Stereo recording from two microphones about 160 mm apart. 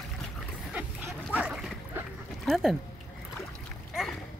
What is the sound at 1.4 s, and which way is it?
Dog, 10° right (ahead or behind).